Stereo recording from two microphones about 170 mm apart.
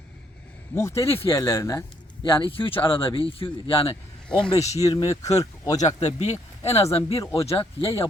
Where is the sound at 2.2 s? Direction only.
30° left (ahead or behind).